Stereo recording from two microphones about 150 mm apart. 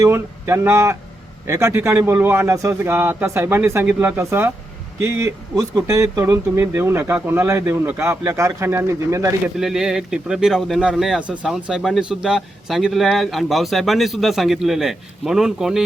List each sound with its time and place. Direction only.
0.0 s speech: 15° right (ahead or behind)
9.6 s speech: 5° right (ahead or behind)